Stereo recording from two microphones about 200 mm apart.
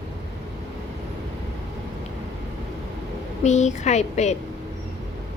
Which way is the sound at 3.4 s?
35° left (ahead or behind).